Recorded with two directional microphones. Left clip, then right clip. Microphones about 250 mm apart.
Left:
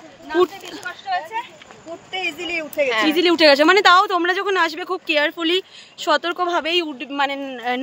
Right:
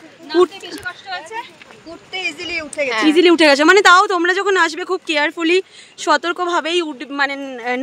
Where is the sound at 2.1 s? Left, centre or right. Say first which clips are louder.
Right 1 dB; centre.